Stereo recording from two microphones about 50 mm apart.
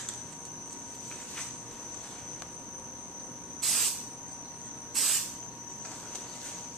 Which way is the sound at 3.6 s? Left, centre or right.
Centre.